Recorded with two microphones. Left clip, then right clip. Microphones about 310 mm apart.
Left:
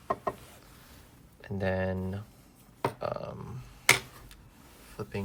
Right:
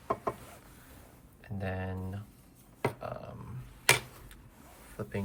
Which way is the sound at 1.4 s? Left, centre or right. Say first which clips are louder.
Left 8 dB; centre.